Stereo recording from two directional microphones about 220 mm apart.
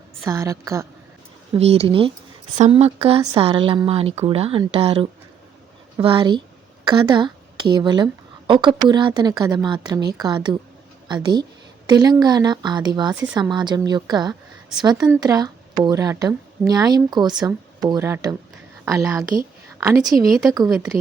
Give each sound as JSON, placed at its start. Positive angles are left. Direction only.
{"t": 0.3, "sound": "speech", "side_deg": -15}
{"t": 1.5, "sound": "a woman's voice", "side_deg": -30}